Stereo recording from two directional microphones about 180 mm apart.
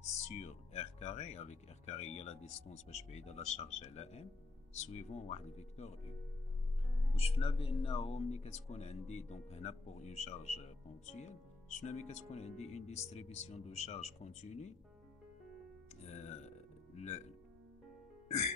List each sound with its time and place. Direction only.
0.3 s speech: 40° left (ahead or behind)
7.2 s speech: 35° left (ahead or behind)
16.0 s music: 40° left (ahead or behind)